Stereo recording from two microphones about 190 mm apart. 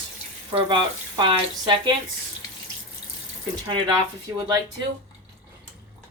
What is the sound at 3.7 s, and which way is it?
Speech, 25° right (ahead or behind).